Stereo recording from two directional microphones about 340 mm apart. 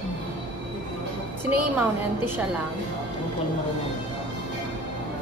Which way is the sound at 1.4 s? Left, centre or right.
Centre.